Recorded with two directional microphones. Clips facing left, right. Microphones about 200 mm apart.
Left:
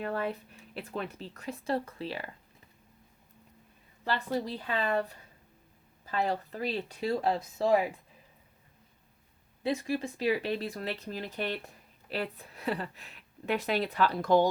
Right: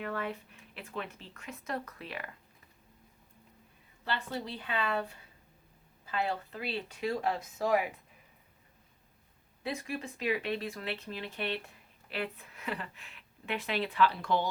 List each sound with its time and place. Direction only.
0.0 s speech: 35° left (ahead or behind)
4.0 s speech: 40° left (ahead or behind)
6.1 s speech: 40° left (ahead or behind)
9.6 s speech: 30° left (ahead or behind)